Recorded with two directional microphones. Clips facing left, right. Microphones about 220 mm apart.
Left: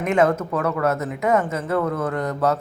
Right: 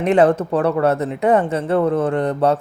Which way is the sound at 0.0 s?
35° right (ahead or behind).